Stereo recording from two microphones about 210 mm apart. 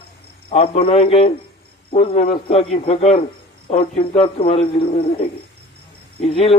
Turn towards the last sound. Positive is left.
turn(degrees=25)  # may be behind; listen again after turning